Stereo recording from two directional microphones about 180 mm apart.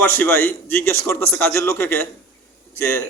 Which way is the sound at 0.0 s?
10° left (ahead or behind).